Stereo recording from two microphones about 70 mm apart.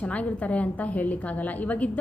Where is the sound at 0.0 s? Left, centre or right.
Centre.